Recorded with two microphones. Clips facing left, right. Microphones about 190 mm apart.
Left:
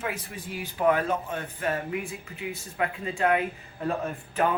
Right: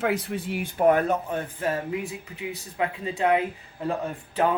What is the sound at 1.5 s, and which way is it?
Speech, 20° right (ahead or behind).